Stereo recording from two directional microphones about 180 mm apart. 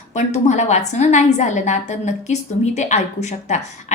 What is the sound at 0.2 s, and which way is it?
A woman's voice, 40° left (ahead or behind).